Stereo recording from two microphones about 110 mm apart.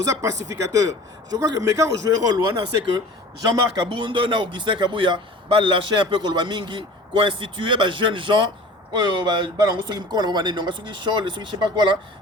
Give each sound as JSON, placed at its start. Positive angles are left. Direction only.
{"t": 0.0, "sound": "a man's voice", "side_deg": -25}
{"t": 3.4, "sound": "a man's voice", "side_deg": -35}
{"t": 3.8, "sound": "a man's voice", "side_deg": -50}